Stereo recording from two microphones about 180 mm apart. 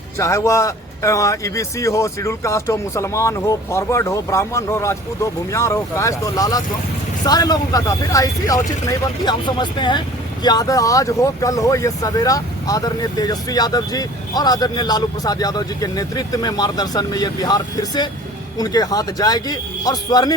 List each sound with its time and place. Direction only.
0.2 s speech: 15° left (ahead or behind)